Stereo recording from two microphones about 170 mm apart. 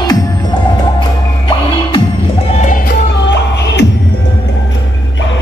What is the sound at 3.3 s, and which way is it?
Music, 90° left.